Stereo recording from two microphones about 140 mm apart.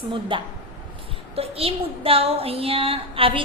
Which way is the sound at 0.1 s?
35° right (ahead or behind).